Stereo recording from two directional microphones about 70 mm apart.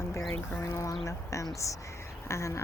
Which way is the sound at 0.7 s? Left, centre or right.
Left.